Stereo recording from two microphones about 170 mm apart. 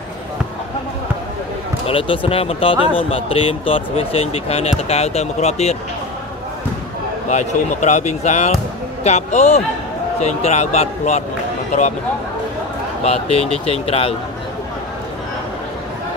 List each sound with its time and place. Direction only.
1.9 s speech: 35° left (ahead or behind)
7.2 s speech: 45° left (ahead or behind)
13.0 s speech: 35° left (ahead or behind)